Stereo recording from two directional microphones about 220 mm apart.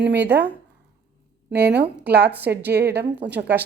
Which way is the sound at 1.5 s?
50° right (ahead or behind).